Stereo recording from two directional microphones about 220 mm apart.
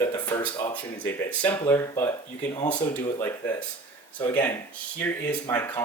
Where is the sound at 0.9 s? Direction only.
5° left (ahead or behind).